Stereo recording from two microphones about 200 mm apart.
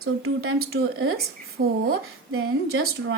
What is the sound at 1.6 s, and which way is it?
Speech, 60° right (ahead or behind).